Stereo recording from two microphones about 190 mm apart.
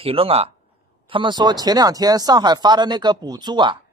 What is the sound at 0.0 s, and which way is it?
Speech, 30° right (ahead or behind).